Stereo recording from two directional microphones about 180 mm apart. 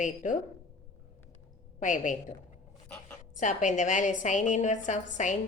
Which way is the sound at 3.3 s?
45° left (ahead or behind).